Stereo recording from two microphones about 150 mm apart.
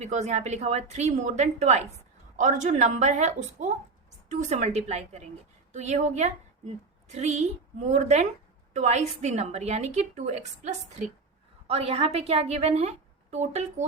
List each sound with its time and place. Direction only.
0.0 s a woman's voice: 50° right (ahead or behind)